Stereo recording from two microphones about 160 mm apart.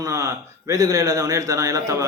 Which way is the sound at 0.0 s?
20° right (ahead or behind).